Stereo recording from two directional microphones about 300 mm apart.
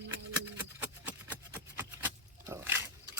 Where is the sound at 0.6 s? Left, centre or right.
Centre.